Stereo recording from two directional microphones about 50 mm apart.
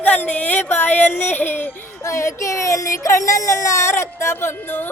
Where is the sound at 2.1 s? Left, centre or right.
Left.